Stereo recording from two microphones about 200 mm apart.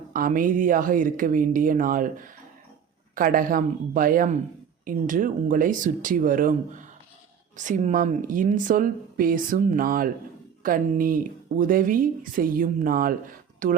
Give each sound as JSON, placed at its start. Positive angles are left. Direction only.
{"t": 0.1, "sound": "speech", "side_deg": -45}